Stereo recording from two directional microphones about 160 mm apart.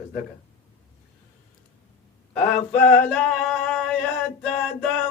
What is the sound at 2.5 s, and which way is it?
Male singing, 10° left (ahead or behind).